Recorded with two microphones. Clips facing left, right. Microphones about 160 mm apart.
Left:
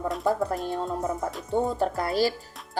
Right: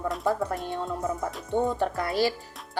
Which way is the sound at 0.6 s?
40° left (ahead or behind).